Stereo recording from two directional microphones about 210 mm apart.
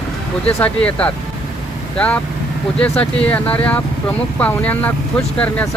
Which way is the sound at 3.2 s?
5° left (ahead or behind).